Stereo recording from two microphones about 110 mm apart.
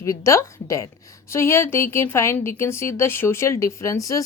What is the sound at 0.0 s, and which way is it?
A woman's voice, 25° left (ahead or behind).